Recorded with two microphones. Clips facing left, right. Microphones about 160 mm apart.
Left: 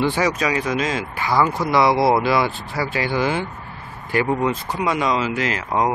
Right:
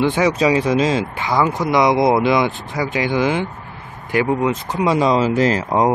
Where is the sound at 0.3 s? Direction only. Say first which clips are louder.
Right 6 dB; 25° right (ahead or behind).